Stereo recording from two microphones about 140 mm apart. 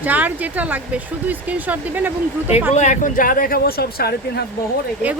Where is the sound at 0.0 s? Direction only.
10° right (ahead or behind).